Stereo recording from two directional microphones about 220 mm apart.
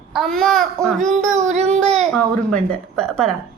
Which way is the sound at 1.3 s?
30° right (ahead or behind).